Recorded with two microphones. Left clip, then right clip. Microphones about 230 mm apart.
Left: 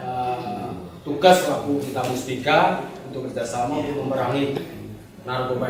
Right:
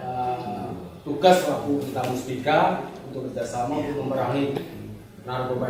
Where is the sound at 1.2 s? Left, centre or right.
Centre.